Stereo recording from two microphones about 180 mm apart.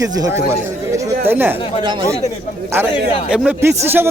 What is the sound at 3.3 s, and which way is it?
Speech, 5° right (ahead or behind).